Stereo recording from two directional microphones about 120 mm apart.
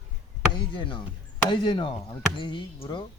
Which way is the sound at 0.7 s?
45° left (ahead or behind).